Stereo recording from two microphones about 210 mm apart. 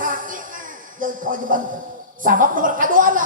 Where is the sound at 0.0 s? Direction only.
40° right (ahead or behind).